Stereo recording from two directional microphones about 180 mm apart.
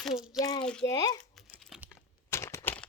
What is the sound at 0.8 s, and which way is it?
Speech, 20° left (ahead or behind).